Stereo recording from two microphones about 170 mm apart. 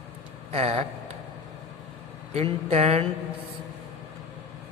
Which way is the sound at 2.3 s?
35° right (ahead or behind).